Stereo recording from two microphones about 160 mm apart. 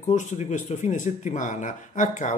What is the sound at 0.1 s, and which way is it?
Speech, 50° left (ahead or behind).